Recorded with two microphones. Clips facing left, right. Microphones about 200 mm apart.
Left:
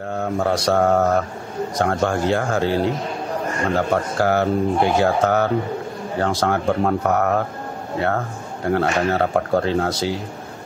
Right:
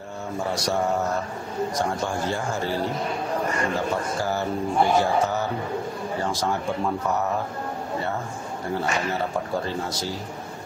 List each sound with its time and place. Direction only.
0.2 s mantra: 65° left (ahead or behind)
1.8 s speech: 65° left (ahead or behind)
8.6 s speech: 65° left (ahead or behind)